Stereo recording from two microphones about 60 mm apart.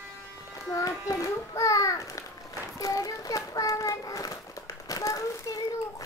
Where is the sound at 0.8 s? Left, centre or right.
Left.